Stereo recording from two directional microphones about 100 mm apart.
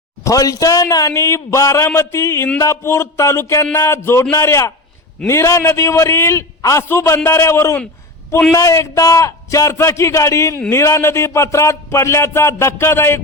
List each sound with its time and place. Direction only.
0.3 s a man's voice: 35° left (ahead or behind)